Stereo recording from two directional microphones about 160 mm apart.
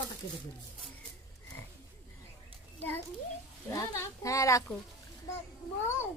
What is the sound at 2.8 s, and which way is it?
A child's voice, 10° left (ahead or behind).